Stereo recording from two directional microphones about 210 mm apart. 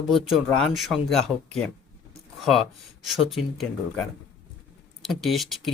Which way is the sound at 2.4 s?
Centre (ahead or behind).